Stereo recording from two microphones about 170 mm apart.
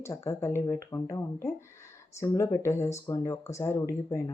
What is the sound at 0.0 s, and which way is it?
Speech, 15° left (ahead or behind).